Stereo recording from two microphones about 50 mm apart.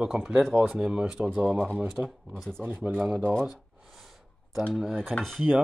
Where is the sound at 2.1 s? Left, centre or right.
Centre.